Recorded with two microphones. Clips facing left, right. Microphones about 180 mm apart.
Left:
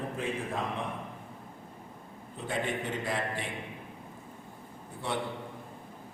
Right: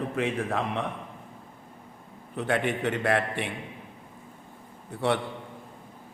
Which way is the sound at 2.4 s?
70° right (ahead or behind).